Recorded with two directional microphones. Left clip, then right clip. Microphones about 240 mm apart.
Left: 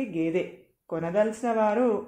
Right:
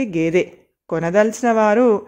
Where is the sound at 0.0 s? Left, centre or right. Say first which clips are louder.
Right 9 dB; right.